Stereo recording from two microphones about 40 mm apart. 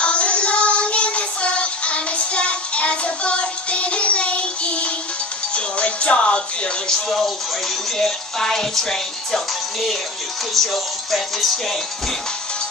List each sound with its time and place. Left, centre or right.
0.0 s music: left
7.1 s music: centre
8.0 s speech: centre
10.5 s music: centre